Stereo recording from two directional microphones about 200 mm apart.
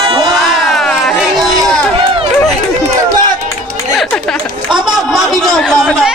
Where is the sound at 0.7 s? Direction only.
Centre (ahead or behind).